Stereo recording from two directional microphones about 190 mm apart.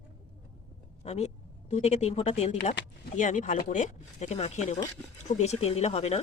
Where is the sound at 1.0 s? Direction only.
35° left (ahead or behind).